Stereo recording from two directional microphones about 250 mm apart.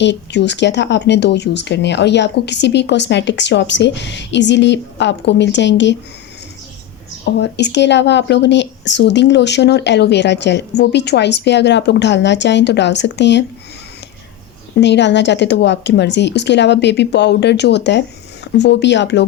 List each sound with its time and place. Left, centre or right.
0.0 s speech: left
7.3 s speech: left
14.8 s speech: left